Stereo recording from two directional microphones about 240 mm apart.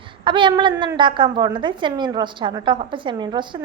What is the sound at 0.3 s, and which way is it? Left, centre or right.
A woman's voice, centre.